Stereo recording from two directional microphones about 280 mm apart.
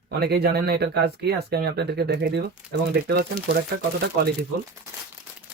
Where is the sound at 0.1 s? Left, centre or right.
Right.